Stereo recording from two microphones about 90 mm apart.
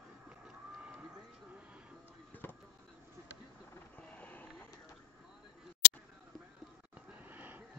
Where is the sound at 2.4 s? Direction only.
25° left (ahead or behind).